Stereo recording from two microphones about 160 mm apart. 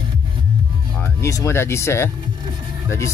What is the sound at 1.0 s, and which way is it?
Speech, 20° left (ahead or behind).